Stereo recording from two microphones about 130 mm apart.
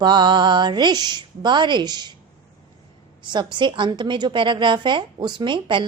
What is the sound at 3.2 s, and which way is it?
A woman's voice, 35° right (ahead or behind).